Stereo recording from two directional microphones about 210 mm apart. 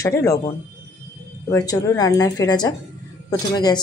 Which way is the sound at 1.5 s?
15° left (ahead or behind).